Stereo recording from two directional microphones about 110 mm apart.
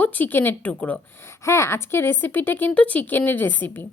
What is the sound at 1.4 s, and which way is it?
A woman's voice, 25° left (ahead or behind).